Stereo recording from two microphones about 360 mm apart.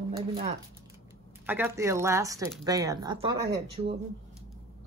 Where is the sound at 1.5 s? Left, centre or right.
Centre.